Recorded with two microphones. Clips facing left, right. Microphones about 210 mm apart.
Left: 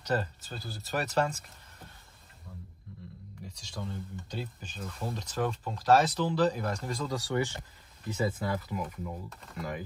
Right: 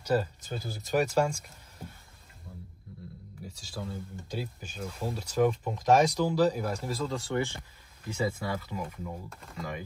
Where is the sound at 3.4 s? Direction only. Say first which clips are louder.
Right 1 dB; 5° right (ahead or behind).